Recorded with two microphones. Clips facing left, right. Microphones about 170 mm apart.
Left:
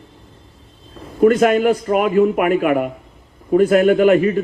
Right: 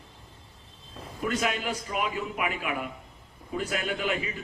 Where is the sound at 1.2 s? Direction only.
55° left (ahead or behind).